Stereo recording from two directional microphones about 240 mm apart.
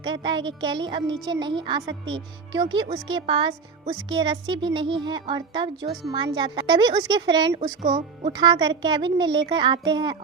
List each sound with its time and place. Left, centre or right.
0.0 s a woman's voice: centre